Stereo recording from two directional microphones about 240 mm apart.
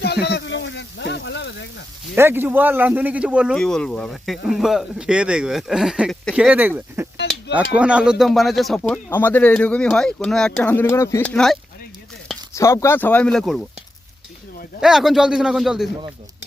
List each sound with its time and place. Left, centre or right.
0.0 s a sound: left
2.1 s speech: centre
12.5 s speech: centre
14.8 s speech: centre